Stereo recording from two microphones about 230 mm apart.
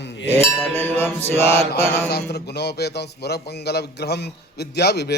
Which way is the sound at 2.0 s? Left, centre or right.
Left.